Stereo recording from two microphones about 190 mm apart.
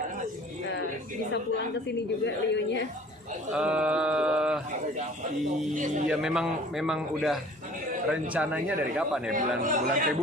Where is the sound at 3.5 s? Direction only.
5° right (ahead or behind).